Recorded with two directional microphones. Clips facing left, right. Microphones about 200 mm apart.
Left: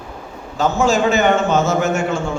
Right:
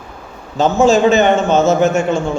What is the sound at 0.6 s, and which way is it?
A man's voice, 20° right (ahead or behind).